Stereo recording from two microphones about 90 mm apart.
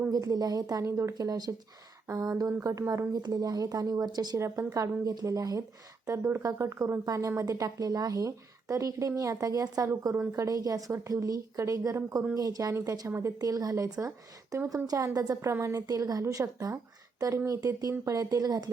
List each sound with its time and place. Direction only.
0.1 s speech: 45° right (ahead or behind)
0.9 s speech: 30° right (ahead or behind); by 4.4 s 50° right (ahead or behind)
4.4 s speech: 35° right (ahead or behind)
6.2 s speech: 30° right (ahead or behind)
13.4 s speech: 40° right (ahead or behind)
15.4 s speech: 30° right (ahead or behind)
15.9 s speech: 40° right (ahead or behind)